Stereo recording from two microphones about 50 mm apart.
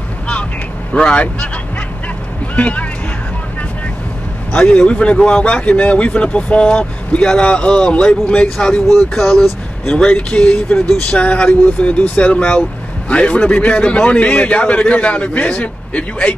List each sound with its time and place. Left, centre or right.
0.9 s speech: left
2.5 s speech: left
4.6 s speech: left
8.9 s speech: centre
9.9 s speech: left